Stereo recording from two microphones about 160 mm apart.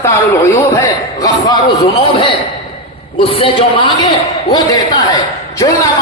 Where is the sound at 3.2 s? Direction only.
35° left (ahead or behind).